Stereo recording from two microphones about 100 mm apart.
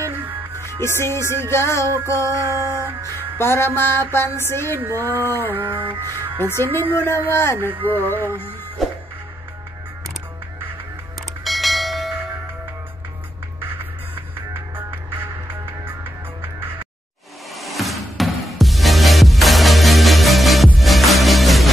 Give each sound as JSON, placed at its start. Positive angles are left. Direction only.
{"t": 0.0, "sound": "music", "side_deg": -25}
{"t": 0.7, "sound": "a woman's voice", "side_deg": 25}
{"t": 2.4, "sound": "mantra", "side_deg": -30}
{"t": 3.3, "sound": "a woman's voice", "side_deg": 25}
{"t": 5.5, "sound": "music", "side_deg": -20}
{"t": 6.0, "sound": "speech", "side_deg": -30}
{"t": 6.6, "sound": "a woman's voice", "side_deg": 25}
{"t": 7.7, "sound": "music", "side_deg": -20}
{"t": 11.4, "sound": "bell", "side_deg": 0}
{"t": 13.6, "sound": "music", "side_deg": -20}
{"t": 17.6, "sound": "music", "side_deg": 0}